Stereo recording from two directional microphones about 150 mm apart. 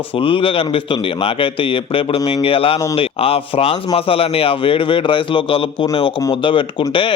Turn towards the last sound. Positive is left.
turn(degrees=35)  # may be behind; listen again after turning